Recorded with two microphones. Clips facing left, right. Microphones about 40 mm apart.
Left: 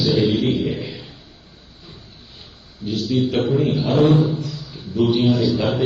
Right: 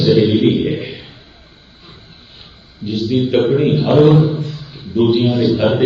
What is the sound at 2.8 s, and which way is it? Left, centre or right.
Speech, right.